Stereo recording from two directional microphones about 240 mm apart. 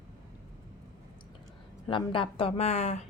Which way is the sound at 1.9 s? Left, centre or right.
Left.